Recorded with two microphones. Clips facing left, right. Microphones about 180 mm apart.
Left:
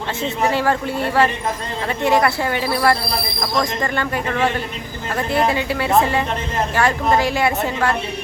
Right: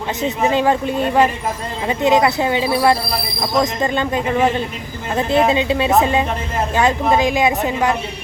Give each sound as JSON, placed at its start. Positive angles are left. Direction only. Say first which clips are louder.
{"t": 0.2, "sound": "a woman's voice", "louder": "right 3 dB", "side_deg": -20}